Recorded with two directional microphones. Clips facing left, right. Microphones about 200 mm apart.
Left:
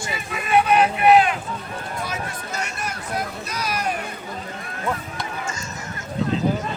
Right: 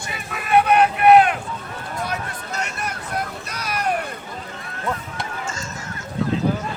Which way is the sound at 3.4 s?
60° right (ahead or behind).